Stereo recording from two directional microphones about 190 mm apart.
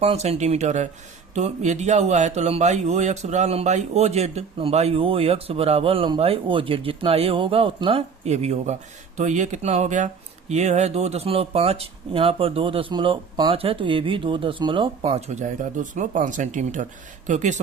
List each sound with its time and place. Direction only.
0.0 s a man's voice: 35° right (ahead or behind)